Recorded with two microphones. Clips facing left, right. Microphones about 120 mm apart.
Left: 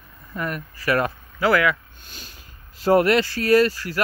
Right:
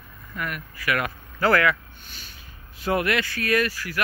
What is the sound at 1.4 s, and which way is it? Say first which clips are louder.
Speech: left 1 dB; 15° left (ahead or behind).